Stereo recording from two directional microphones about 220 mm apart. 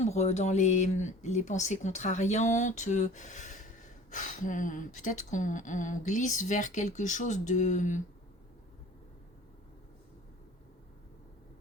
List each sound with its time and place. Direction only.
0.0 s speech: 30° left (ahead or behind)